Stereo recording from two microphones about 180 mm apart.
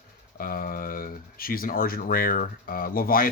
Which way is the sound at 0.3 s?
50° left (ahead or behind).